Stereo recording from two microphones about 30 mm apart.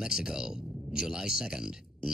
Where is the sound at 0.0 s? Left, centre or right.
Right.